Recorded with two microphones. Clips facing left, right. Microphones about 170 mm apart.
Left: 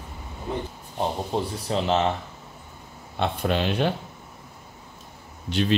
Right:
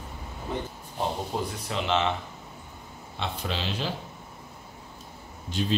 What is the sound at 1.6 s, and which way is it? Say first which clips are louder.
Speech: left 4 dB; 40° left (ahead or behind).